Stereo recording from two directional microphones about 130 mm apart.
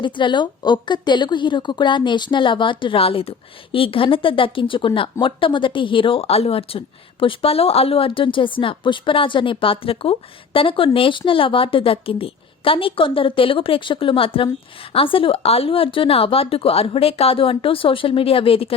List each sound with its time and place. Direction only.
0.0 s a woman's voice: 40° left (ahead or behind)